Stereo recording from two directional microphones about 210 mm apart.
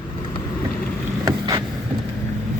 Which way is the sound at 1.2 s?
20° right (ahead or behind).